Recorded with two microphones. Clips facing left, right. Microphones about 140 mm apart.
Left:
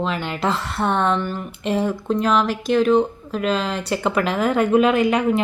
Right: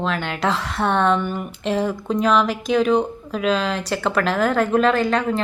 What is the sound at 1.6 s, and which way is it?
A woman's voice, 5° left (ahead or behind).